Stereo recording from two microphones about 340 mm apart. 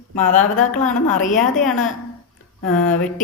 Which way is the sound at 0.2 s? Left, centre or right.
Left.